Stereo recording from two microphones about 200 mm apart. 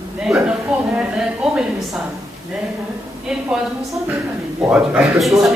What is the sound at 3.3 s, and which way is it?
Speech, 5° right (ahead or behind).